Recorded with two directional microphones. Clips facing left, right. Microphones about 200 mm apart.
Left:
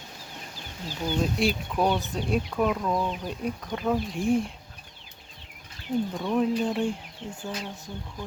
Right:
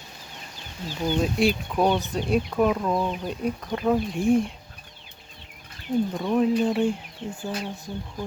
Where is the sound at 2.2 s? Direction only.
5° right (ahead or behind).